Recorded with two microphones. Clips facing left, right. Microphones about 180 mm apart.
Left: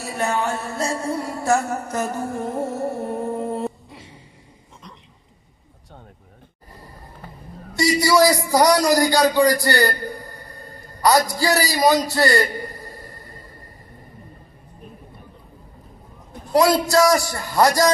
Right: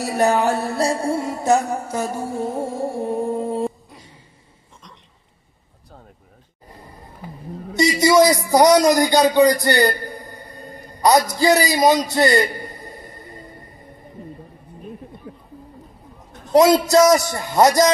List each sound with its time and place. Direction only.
0.0 s music: 35° right (ahead or behind); by 3.7 s 10° right (ahead or behind)
8.2 s speech: centre (ahead or behind)
8.5 s a man's voice: 20° right (ahead or behind)
9.3 s a sound: 20° right (ahead or behind)
15.3 s a sound: 65° right (ahead or behind)
16.7 s a man's voice: 20° right (ahead or behind)